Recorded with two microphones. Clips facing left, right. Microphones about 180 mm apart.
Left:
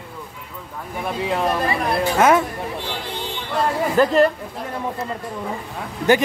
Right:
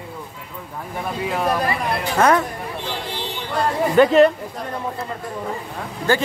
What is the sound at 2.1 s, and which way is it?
Speech, 5° left (ahead or behind).